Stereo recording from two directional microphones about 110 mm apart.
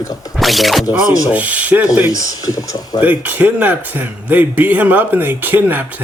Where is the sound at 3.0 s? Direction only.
15° right (ahead or behind).